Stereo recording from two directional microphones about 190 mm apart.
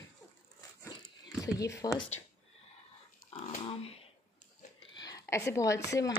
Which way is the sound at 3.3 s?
30° left (ahead or behind).